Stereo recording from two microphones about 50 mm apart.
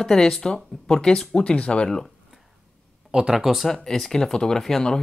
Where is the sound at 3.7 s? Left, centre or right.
Centre.